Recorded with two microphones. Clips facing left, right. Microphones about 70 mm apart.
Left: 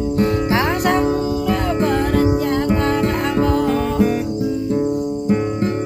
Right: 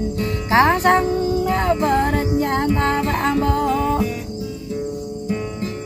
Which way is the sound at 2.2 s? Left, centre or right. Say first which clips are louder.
Left 2 dB; left.